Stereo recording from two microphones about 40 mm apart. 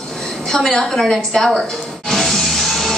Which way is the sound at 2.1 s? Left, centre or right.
Centre.